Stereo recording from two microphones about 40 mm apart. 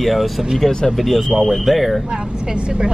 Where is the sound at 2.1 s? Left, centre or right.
Right.